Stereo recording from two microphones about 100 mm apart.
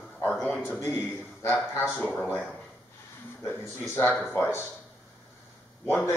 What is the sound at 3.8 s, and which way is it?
Speech, 20° left (ahead or behind).